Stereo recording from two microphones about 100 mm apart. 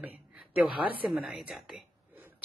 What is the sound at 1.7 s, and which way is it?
Whispering, 15° right (ahead or behind).